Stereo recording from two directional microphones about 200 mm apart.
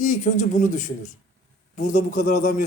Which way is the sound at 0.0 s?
40° left (ahead or behind).